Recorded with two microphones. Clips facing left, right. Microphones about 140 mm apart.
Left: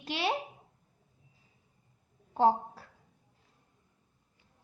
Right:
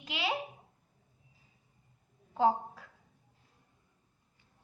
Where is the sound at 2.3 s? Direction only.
30° left (ahead or behind).